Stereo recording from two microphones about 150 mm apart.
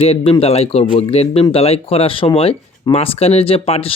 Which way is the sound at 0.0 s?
40° left (ahead or behind).